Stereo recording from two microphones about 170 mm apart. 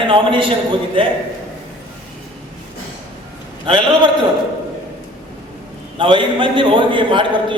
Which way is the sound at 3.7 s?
25° right (ahead or behind).